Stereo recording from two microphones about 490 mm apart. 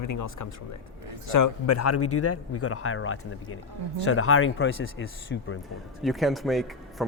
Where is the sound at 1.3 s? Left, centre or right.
Left.